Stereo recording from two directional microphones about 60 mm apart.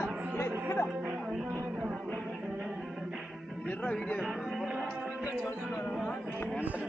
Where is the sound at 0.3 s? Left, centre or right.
Left.